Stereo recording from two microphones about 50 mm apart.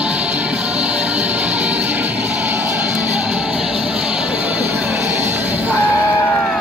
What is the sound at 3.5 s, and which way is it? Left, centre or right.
Music, centre.